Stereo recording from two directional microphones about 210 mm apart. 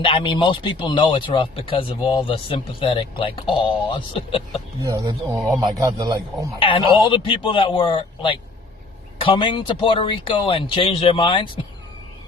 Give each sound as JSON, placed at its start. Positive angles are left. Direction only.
{"t": 0.0, "sound": "speech", "side_deg": 25}
{"t": 4.8, "sound": "a man's voice", "side_deg": -15}
{"t": 6.6, "sound": "speech", "side_deg": 25}